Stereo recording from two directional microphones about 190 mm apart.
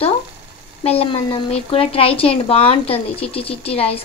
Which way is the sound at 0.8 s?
30° left (ahead or behind).